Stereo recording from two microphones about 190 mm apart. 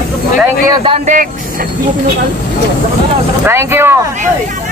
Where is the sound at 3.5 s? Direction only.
15° right (ahead or behind).